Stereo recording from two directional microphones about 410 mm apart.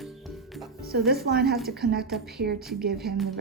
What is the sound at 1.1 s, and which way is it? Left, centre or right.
Speech, right.